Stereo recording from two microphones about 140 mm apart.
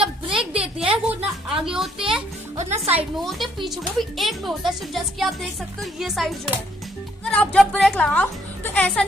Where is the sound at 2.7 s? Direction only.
45° right (ahead or behind).